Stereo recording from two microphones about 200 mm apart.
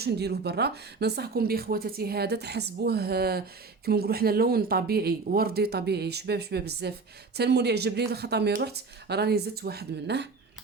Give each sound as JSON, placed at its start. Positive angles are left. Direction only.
{"t": 0.0, "sound": "speech", "side_deg": -55}